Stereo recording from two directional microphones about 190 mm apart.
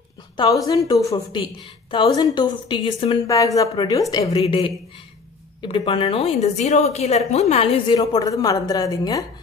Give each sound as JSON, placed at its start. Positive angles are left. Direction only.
{"t": 0.4, "sound": "a woman's voice", "side_deg": 20}
{"t": 3.3, "sound": "a woman's voice", "side_deg": 15}